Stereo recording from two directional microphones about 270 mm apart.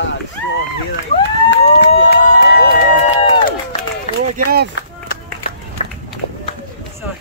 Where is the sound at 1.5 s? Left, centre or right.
Left.